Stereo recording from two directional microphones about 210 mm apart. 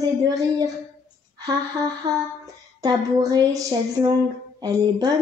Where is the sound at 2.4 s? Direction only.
20° right (ahead or behind).